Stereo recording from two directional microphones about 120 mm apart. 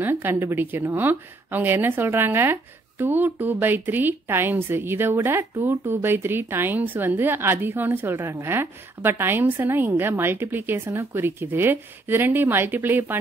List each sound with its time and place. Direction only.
0.0 s a woman's voice: 15° right (ahead or behind)